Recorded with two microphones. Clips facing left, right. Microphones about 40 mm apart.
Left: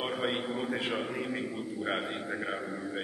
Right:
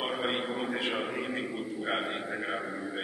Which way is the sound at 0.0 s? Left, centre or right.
Centre.